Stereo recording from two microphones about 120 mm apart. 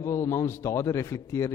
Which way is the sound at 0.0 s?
25° left (ahead or behind).